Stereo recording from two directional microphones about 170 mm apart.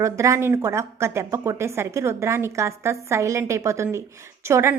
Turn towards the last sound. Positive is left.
turn(degrees=-15)  # may be behind; listen again after turning